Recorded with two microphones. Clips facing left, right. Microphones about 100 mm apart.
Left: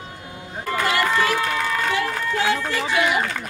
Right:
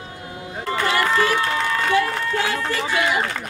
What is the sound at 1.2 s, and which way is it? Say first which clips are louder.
Run: right 1 dB; 30° right (ahead or behind).